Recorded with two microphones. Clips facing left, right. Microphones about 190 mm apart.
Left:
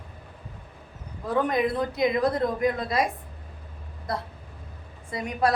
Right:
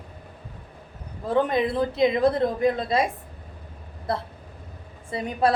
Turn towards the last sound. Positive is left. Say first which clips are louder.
# right 2 dB
turn(degrees=-30)  # may be behind; listen again after turning